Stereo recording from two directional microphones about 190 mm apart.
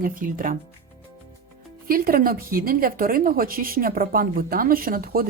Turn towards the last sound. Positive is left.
turn(degrees=-50)  # may be behind; listen again after turning